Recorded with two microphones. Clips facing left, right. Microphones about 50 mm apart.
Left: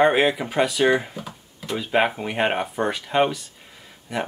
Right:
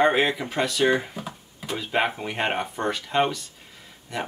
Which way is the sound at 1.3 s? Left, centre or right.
Centre.